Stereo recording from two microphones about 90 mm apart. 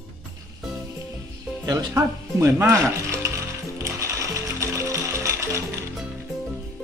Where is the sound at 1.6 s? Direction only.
45° right (ahead or behind).